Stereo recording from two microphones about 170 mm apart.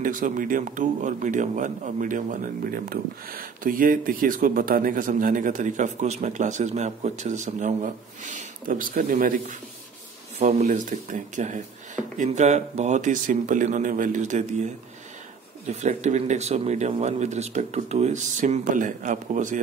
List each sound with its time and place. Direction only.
0.0 s speech: 50° right (ahead or behind)